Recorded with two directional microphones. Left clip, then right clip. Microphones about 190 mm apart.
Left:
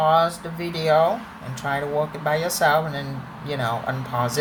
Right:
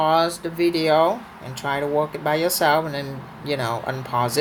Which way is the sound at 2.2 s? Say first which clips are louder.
Even; 35° right (ahead or behind).